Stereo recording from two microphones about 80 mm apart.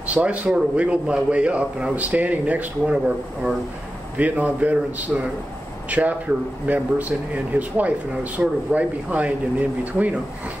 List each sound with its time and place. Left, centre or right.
0.1 s a man's voice: centre
4.2 s a man's voice: centre